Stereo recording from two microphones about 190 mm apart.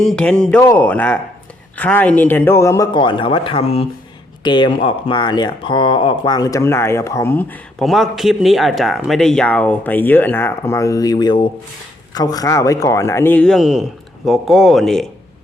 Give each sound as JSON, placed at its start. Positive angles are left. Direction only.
{"t": 0.0, "sound": "speech", "side_deg": 5}